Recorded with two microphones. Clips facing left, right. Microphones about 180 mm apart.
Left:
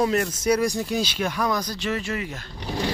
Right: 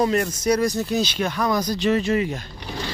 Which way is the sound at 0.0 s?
Centre (ahead or behind).